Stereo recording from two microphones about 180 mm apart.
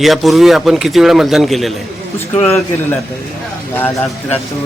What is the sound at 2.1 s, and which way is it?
Speech, 10° left (ahead or behind).